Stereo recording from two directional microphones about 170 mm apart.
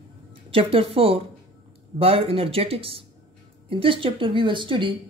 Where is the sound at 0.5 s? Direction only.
35° right (ahead or behind).